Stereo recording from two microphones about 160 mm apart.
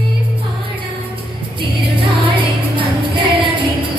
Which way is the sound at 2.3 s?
30° right (ahead or behind).